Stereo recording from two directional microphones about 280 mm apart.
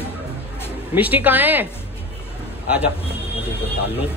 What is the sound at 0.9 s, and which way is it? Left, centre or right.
Speech, centre.